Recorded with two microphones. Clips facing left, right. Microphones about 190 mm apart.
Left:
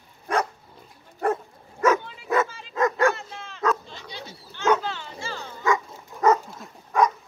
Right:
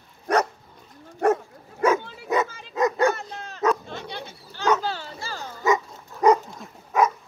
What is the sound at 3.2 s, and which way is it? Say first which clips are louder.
Dog: right 3 dB; 40° right (ahead or behind).